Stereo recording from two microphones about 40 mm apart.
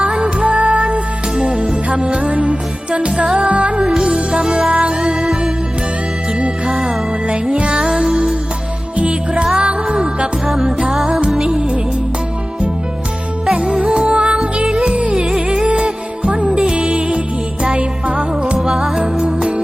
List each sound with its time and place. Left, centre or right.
0.0 s music: right
0.4 s music: right
1.4 s music: centre
3.3 s music: right; by 5.4 s centre
6.7 s music: centre
7.5 s music: right
7.8 s music: centre
9.0 s music: right
10.4 s music: centre
13.5 s music: right
18.6 s music: centre